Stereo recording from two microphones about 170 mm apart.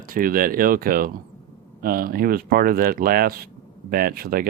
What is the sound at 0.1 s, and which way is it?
Speech, 55° right (ahead or behind).